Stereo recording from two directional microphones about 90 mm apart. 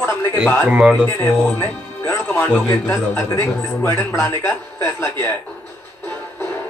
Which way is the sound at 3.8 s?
30° left (ahead or behind).